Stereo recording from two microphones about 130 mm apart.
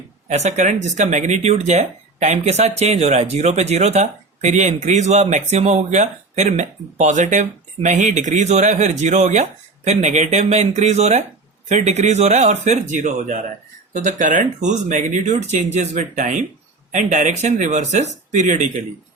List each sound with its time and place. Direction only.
0.3 s speech: 60° right (ahead or behind)